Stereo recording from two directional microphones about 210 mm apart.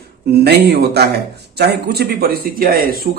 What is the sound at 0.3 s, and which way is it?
A man's voice, 50° right (ahead or behind).